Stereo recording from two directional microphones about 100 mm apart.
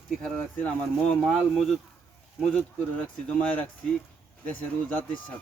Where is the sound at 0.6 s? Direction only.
15° left (ahead or behind).